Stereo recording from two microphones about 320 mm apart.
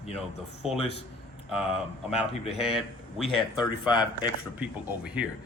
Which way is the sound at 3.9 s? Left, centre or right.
Centre.